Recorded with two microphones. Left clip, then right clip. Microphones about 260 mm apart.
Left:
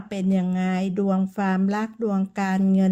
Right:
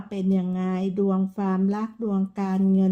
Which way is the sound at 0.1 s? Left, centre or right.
Left.